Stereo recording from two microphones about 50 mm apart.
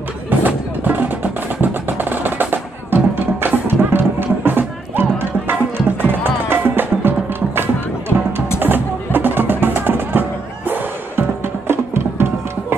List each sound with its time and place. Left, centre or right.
0.4 s music: right